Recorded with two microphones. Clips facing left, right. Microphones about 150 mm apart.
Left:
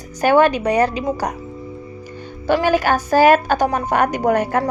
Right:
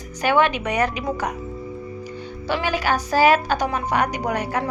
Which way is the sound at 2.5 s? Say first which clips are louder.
Left 6 dB; 45° left (ahead or behind).